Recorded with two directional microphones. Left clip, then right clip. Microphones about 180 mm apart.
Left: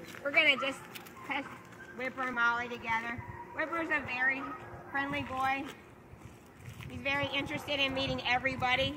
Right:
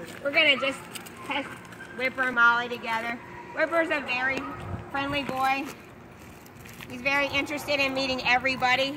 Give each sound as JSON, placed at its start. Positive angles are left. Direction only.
{"t": 0.2, "sound": "speech", "side_deg": -5}
{"t": 2.0, "sound": "a woman's voice", "side_deg": 20}
{"t": 7.0, "sound": "a woman's voice", "side_deg": 10}